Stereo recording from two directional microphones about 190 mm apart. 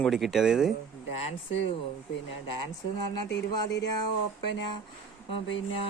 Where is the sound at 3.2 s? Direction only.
65° left (ahead or behind).